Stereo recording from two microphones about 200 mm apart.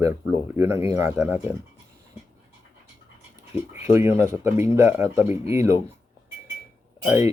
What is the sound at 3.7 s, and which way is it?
Speech, 10° right (ahead or behind).